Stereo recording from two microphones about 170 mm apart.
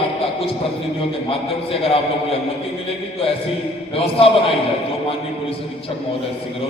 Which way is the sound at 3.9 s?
35° left (ahead or behind).